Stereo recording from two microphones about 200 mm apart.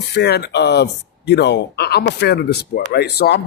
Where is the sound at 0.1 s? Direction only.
55° left (ahead or behind).